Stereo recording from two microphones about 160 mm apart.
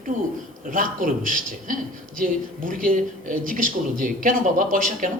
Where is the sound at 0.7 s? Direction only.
55° right (ahead or behind).